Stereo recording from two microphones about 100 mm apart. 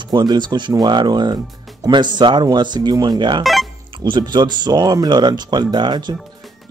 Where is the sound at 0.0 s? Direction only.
45° right (ahead or behind).